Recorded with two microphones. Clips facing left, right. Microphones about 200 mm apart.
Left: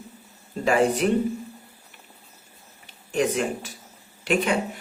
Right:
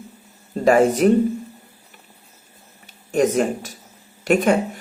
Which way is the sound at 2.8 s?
45° right (ahead or behind).